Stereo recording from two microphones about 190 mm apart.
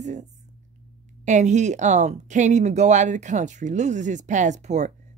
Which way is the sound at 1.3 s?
40° right (ahead or behind).